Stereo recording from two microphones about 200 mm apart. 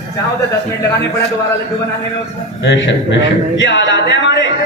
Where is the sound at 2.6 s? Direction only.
60° left (ahead or behind).